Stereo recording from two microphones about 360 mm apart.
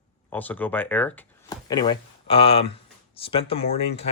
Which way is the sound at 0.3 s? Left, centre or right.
Centre.